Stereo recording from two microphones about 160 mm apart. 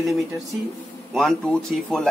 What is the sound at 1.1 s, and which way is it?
Speech, 5° left (ahead or behind).